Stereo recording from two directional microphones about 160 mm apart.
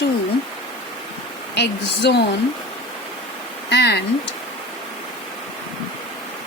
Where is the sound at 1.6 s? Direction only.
90° left.